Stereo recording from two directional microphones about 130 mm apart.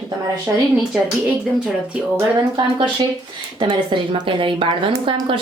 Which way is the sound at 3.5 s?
40° right (ahead or behind).